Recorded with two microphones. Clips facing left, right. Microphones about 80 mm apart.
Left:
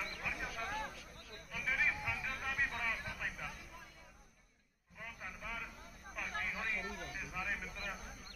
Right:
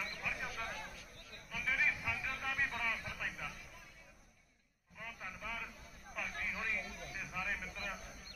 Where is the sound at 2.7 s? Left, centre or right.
Left.